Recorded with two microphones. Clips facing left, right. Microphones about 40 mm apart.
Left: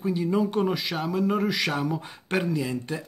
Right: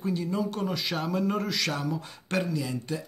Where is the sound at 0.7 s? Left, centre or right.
Centre.